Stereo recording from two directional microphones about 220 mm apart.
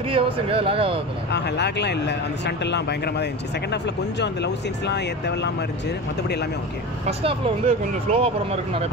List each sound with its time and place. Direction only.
0.1 s speech: 25° right (ahead or behind)
1.3 s speech: 50° left (ahead or behind)
7.1 s speech: 25° right (ahead or behind)